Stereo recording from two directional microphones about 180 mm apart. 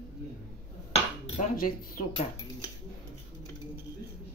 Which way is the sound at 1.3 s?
45° left (ahead or behind).